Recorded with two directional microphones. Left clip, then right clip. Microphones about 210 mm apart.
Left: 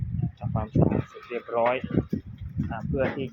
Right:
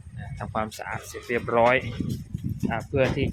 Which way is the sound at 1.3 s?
40° right (ahead or behind).